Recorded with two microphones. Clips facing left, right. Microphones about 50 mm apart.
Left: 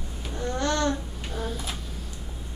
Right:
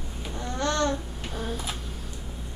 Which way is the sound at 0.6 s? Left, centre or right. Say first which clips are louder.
Even; centre.